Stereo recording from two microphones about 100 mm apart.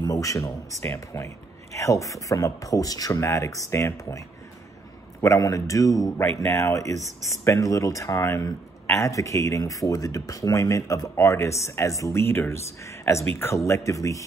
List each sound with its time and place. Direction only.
0.0 s speech: 35° left (ahead or behind)
5.2 s speech: 35° left (ahead or behind)